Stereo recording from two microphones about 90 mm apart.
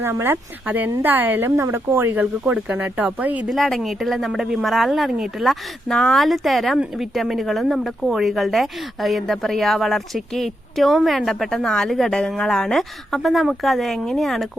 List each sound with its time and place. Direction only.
0.0 s speech: 25° right (ahead or behind)
3.5 s speech: centre (ahead or behind)